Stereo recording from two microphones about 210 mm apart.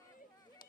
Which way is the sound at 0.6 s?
40° left (ahead or behind).